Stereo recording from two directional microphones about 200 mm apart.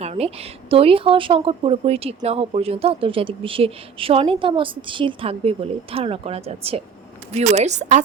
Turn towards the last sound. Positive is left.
turn(degrees=-35)  # may be behind; listen again after turning